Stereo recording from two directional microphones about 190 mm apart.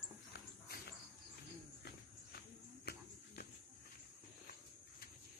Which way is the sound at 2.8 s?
55° left (ahead or behind).